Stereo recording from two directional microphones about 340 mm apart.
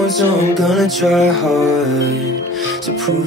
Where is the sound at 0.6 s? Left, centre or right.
Centre.